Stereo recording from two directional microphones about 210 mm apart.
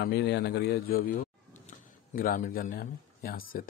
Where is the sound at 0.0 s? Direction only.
50° left (ahead or behind).